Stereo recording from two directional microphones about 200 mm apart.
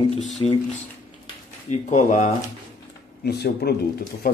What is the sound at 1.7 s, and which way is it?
Speech, 40° left (ahead or behind).